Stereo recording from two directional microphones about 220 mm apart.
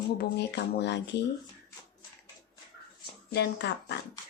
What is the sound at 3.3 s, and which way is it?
Speech, 50° left (ahead or behind).